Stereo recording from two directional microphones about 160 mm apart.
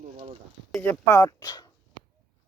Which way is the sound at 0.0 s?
50° right (ahead or behind).